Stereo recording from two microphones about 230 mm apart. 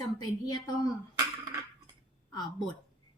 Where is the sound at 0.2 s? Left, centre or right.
Centre.